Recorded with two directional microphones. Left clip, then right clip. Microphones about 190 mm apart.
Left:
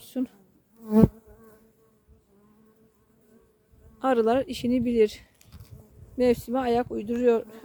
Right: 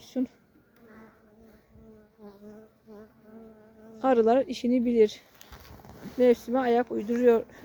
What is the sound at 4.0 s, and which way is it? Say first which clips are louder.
Speech: right 1 dB; 15° left (ahead or behind).